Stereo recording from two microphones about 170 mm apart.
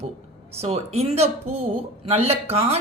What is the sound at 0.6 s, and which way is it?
Speech, 40° right (ahead or behind).